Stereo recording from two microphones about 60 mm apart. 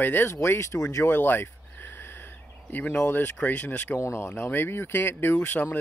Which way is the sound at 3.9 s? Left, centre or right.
Left.